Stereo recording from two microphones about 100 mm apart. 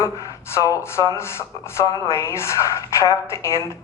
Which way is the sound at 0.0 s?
30° left (ahead or behind).